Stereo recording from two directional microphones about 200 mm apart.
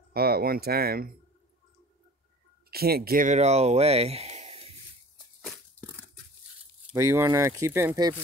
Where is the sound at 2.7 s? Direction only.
50° right (ahead or behind); by 4.7 s 30° right (ahead or behind).